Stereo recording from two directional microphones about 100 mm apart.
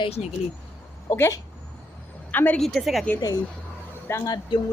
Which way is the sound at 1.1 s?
25° left (ahead or behind).